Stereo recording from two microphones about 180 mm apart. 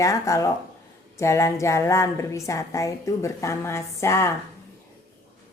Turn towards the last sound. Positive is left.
turn(degrees=15)  # may be behind; listen again after turning